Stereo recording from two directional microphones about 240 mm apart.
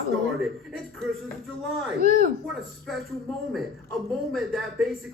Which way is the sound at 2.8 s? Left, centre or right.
Centre.